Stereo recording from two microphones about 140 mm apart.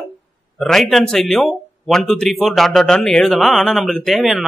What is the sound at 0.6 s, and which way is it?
Speech, centre (ahead or behind).